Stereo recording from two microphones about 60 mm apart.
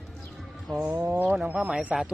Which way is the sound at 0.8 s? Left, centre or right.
Right.